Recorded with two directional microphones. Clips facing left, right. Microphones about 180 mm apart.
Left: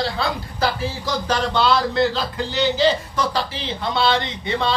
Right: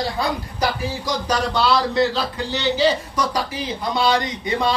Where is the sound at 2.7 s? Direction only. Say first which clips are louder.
Even; 10° right (ahead or behind).